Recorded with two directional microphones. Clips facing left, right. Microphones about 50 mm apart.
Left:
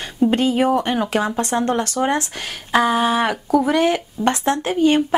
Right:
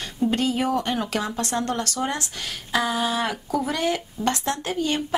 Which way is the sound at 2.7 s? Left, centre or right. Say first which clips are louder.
Left 7 dB; left.